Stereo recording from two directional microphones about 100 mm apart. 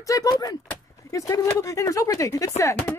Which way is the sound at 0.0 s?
35° left (ahead or behind).